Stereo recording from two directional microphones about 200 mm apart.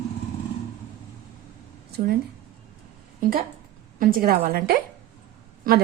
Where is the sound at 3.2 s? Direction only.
45° right (ahead or behind).